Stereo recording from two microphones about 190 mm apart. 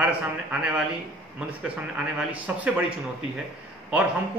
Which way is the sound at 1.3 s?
5° right (ahead or behind).